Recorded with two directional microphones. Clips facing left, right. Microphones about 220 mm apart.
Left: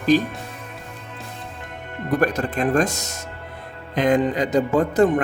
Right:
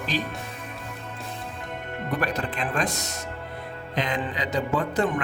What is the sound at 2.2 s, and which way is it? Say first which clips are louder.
Speech: left 8 dB; 45° left (ahead or behind).